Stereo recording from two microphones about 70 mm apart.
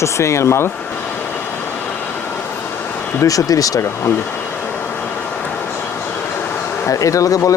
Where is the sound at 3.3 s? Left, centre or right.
Left.